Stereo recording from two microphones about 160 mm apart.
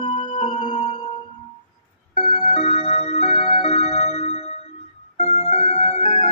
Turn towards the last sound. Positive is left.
turn(degrees=45)  # may be behind; listen again after turning